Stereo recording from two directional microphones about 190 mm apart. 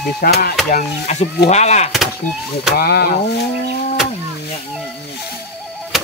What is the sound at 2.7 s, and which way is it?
Speech, 55° left (ahead or behind).